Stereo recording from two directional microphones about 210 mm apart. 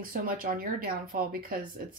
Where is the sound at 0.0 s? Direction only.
45° right (ahead or behind).